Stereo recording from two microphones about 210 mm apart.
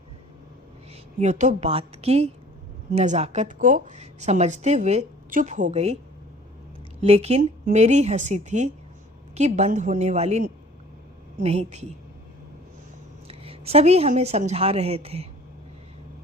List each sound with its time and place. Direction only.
1.2 s a woman's voice: 35° right (ahead or behind)
7.0 s a woman's voice: 30° right (ahead or behind)
13.2 s a woman's voice: 25° right (ahead or behind)